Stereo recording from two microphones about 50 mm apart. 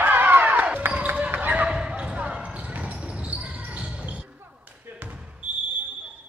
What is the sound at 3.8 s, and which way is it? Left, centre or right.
Basketball bounce, centre.